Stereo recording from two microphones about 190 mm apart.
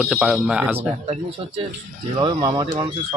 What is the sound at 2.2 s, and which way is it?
Speech, 25° right (ahead or behind).